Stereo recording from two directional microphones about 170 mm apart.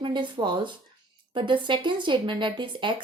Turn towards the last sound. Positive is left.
turn(degrees=-30)  # may be behind; listen again after turning